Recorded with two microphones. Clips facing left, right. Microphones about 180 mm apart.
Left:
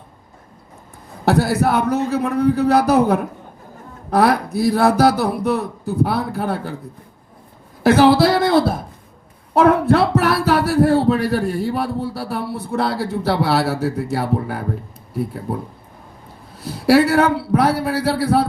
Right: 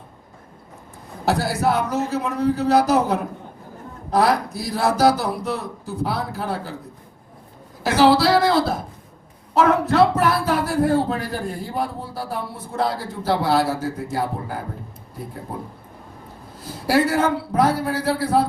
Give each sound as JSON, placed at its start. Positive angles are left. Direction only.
{"t": 1.2, "sound": "speech", "side_deg": 60}
{"t": 7.9, "sound": "speech", "side_deg": 55}
{"t": 16.6, "sound": "a man's voice", "side_deg": 70}